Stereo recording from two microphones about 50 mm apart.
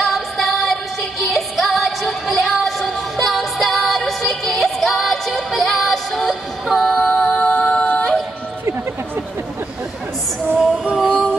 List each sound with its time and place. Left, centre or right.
0.0 s music: centre
7.0 s music: left
7.2 s music: left
10.6 s female singing: centre
11.1 s a sound: left